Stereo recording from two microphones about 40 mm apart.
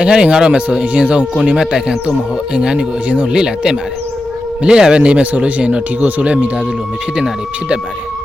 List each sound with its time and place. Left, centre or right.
0.0 s speech: right
2.7 s speech: right
3.3 s speech: centre